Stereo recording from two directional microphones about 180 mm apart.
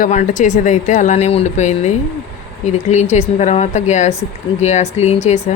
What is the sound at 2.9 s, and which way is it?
Speech, 40° left (ahead or behind).